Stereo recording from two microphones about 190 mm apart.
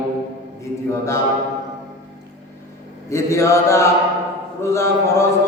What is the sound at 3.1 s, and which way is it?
Chant, 15° left (ahead or behind).